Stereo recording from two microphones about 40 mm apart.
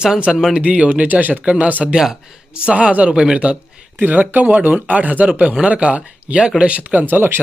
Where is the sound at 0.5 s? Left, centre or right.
Right.